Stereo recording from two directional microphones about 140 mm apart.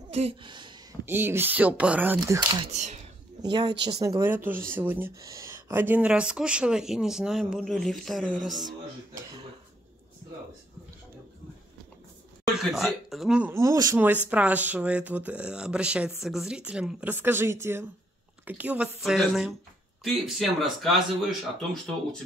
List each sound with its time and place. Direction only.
0.1 s speech: 45° right (ahead or behind)
1.0 s speech: 15° right (ahead or behind)
2.7 s speech: 55° right (ahead or behind)
3.3 s speech: 30° right (ahead or behind); by 8.3 s centre (ahead or behind)
12.4 s speech: centre (ahead or behind)
13.5 s speech: 20° right (ahead or behind)
13.9 s speech: 10° right (ahead or behind)